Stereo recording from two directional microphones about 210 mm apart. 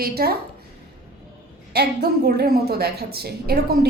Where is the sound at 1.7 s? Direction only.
50° right (ahead or behind).